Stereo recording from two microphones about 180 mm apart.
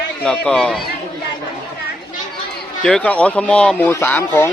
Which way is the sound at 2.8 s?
5° left (ahead or behind).